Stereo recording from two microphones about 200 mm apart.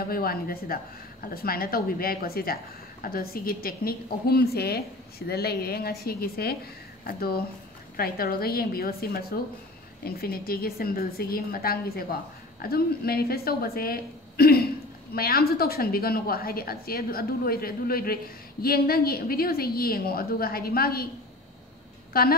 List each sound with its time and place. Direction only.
0.0 s a woman's voice: 50° left (ahead or behind)
22.1 s a woman's voice: 50° left (ahead or behind)